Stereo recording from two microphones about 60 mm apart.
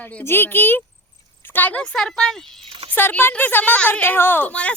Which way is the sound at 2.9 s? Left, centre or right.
Left.